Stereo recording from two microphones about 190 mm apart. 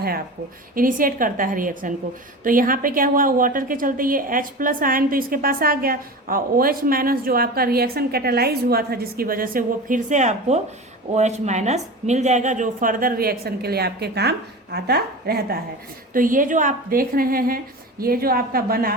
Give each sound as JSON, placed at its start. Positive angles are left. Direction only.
{"t": 0.8, "sound": "a woman's voice", "side_deg": -45}